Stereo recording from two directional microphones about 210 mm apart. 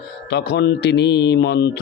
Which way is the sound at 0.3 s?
55° left (ahead or behind).